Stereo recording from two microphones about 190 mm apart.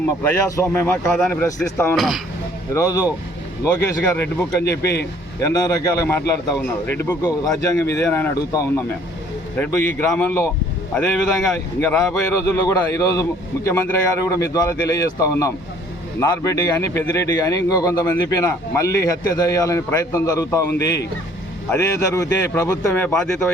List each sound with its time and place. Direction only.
0.3 s a man's voice: 15° left (ahead or behind)
2.0 s a man's voice: centre (ahead or behind)
2.7 s a man's voice: 15° left (ahead or behind)
4.6 s speech: 60° left (ahead or behind)
5.4 s a man's voice: 20° left (ahead or behind)
11.5 s a man's voice: 10° left (ahead or behind)
20.7 s speech: 65° left (ahead or behind)
21.7 s a man's voice: 15° left (ahead or behind)